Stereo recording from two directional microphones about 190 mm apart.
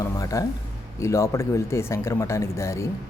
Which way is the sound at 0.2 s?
15° left (ahead or behind).